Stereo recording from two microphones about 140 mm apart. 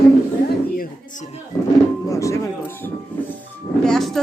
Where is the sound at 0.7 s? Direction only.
90° left.